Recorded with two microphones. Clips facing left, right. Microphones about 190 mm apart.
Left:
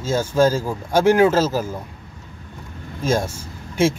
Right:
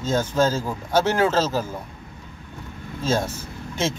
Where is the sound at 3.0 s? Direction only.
10° left (ahead or behind).